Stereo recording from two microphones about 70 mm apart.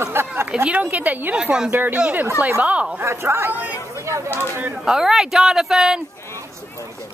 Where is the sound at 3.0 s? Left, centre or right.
Right.